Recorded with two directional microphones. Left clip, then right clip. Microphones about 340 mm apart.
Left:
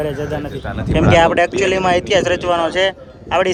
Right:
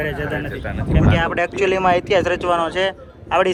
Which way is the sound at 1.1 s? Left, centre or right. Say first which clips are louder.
Left 10 dB; centre.